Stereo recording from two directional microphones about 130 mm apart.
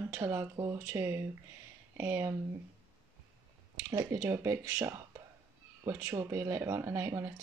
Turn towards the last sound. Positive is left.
turn(degrees=-20)  # may be behind; listen again after turning